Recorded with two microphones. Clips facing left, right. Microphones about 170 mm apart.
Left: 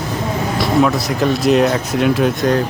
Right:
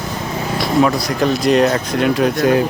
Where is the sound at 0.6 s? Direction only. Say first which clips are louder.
Even; centre (ahead or behind).